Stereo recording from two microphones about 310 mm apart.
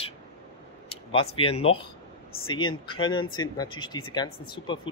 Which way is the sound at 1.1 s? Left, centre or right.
Centre.